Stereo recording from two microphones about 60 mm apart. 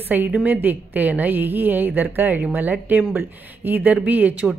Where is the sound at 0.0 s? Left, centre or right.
Right.